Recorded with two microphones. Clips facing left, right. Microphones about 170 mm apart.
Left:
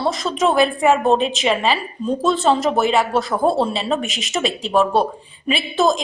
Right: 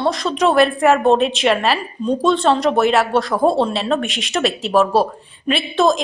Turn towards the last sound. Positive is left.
turn(degrees=0)  # may be behind; listen again after turning